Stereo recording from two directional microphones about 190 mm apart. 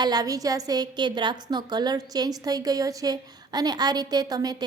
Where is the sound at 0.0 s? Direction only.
20° right (ahead or behind).